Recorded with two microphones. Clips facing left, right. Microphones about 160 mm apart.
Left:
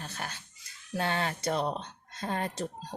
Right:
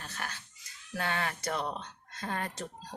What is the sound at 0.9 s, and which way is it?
Speech, 30° left (ahead or behind).